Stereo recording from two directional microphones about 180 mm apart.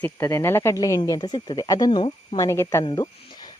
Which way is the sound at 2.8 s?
20° left (ahead or behind).